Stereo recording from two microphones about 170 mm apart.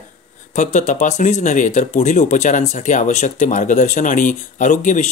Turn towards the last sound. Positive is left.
turn(degrees=45)  # may be behind; listen again after turning